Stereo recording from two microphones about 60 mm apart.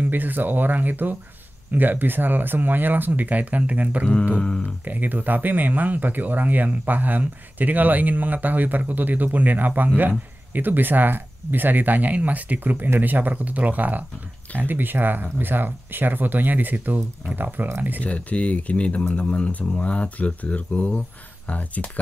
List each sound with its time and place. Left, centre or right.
0.0 s speech: right
4.4 s speech: centre
4.8 s speech: right
18.0 s speech: left